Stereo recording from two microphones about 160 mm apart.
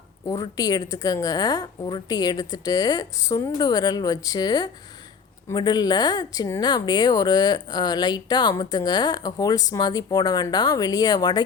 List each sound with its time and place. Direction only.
0.3 s speech: 20° left (ahead or behind)